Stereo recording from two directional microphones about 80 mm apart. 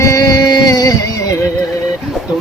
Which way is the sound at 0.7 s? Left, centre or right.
Left.